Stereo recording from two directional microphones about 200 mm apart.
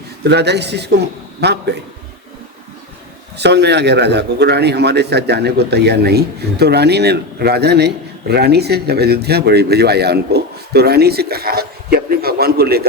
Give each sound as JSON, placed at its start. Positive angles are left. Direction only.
{"t": 0.3, "sound": "speech", "side_deg": -55}
{"t": 3.3, "sound": "a man's voice", "side_deg": -55}